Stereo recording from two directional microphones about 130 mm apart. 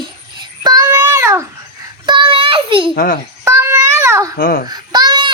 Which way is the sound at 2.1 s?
40° right (ahead or behind).